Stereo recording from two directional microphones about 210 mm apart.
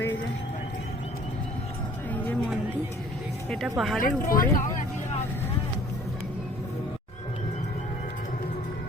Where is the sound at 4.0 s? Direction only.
40° left (ahead or behind).